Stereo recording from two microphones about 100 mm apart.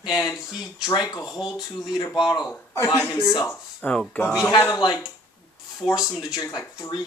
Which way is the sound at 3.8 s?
10° left (ahead or behind).